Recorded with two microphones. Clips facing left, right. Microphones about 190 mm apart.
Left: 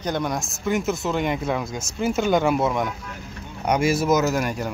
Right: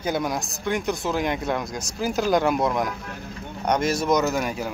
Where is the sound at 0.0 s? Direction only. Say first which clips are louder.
Even; 5° right (ahead or behind).